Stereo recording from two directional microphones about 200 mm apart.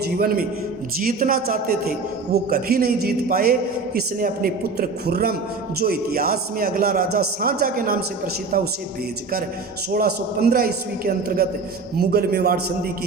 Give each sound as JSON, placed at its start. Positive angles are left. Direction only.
{"t": 0.0, "sound": "a man's voice", "side_deg": -50}
{"t": 9.9, "sound": "a man's voice", "side_deg": -50}